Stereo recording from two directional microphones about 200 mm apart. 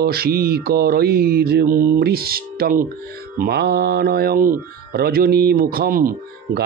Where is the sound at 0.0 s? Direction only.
50° right (ahead or behind).